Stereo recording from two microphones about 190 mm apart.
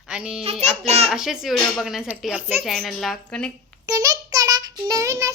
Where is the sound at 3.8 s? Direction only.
20° right (ahead or behind).